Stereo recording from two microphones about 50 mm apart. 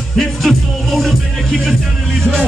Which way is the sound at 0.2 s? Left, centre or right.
Centre.